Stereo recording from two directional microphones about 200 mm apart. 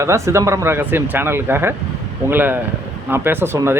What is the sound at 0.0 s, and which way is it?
Speech, 15° right (ahead or behind).